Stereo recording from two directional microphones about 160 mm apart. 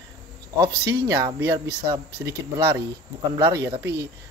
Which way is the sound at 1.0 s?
20° right (ahead or behind).